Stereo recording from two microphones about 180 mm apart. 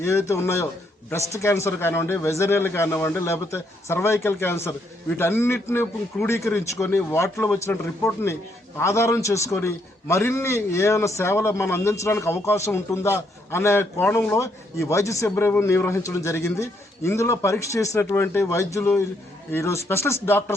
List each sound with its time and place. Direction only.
0.0 s a man's voice: 15° left (ahead or behind)